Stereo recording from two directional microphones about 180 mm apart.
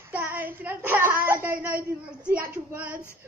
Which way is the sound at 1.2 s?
10° right (ahead or behind).